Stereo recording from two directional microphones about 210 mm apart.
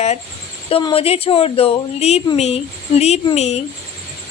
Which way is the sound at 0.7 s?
25° left (ahead or behind).